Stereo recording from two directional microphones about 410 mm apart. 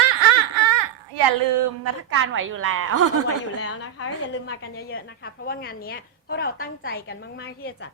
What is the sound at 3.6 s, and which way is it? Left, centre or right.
A woman's voice, left.